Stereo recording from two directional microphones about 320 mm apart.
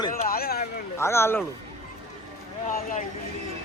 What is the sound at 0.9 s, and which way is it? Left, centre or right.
Speech, centre.